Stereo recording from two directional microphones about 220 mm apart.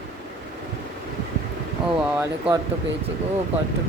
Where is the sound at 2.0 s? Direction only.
5° right (ahead or behind).